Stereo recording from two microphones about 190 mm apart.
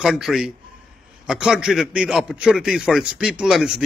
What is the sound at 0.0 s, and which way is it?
A man's voice, centre (ahead or behind).